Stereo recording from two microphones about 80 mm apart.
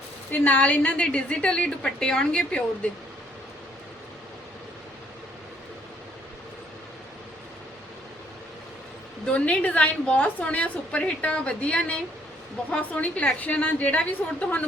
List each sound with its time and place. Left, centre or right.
0.3 s a woman's voice: left
9.2 s a woman's voice: centre